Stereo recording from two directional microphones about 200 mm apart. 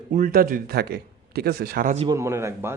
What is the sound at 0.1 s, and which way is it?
Speech, 45° right (ahead or behind).